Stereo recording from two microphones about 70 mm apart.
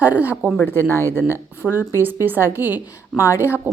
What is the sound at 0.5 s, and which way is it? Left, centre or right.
Speech, left.